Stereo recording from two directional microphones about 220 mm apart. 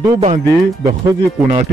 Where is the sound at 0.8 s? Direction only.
15° right (ahead or behind).